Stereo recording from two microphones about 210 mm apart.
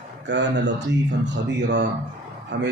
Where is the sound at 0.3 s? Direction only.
55° right (ahead or behind).